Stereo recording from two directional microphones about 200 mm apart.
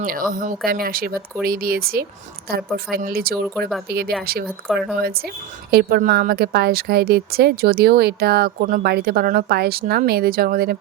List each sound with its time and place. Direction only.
0.0 s a woman's voice: 45° right (ahead or behind)
4.7 s speech: centre (ahead or behind)
5.7 s a woman's voice: 50° right (ahead or behind)